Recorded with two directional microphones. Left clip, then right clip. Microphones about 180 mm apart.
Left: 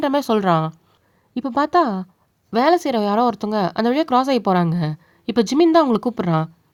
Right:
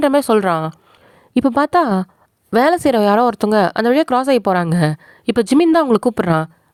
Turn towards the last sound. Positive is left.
turn(degrees=-45)  # may be behind; listen again after turning